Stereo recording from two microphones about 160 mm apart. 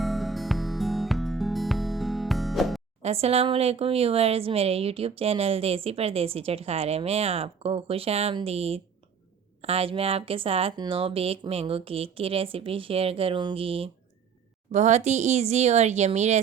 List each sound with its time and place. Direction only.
0.0 s music: centre (ahead or behind)
3.0 s speech: 40° right (ahead or behind)
14.7 s speech: 45° right (ahead or behind)